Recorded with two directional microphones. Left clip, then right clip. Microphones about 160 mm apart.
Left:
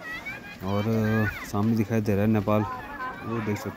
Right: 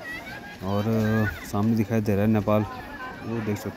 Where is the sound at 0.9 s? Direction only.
Centre (ahead or behind).